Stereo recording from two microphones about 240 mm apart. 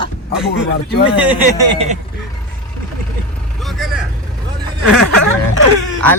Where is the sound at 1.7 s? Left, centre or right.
Right.